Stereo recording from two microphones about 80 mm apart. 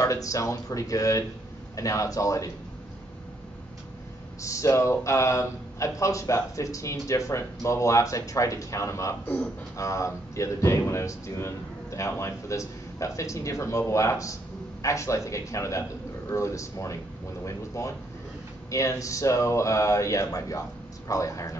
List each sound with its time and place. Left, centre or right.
0.0 s speech: left
4.4 s speech: left